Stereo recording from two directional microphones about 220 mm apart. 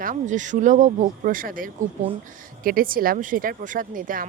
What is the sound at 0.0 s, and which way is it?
A woman's voice, 35° right (ahead or behind).